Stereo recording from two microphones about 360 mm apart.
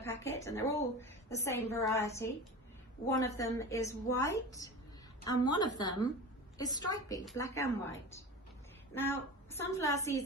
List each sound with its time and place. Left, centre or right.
0.0 s a woman's voice: centre
9.0 s a woman's voice: centre